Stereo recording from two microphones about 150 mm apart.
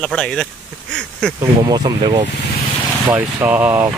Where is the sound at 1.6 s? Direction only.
25° right (ahead or behind).